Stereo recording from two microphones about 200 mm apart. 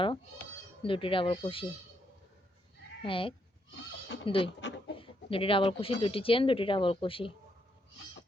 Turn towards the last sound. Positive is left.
turn(degrees=25)  # may be behind; listen again after turning